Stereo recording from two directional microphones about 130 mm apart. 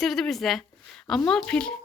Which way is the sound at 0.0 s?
Centre (ahead or behind).